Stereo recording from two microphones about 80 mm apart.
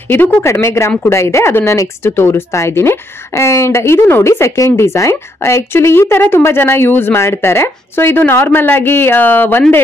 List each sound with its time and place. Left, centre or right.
0.1 s speech: left